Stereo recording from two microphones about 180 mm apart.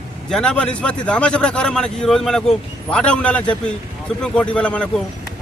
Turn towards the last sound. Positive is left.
turn(degrees=5)  # may be behind; listen again after turning